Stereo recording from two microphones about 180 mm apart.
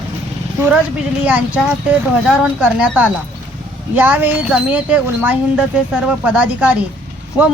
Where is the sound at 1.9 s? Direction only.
5° right (ahead or behind).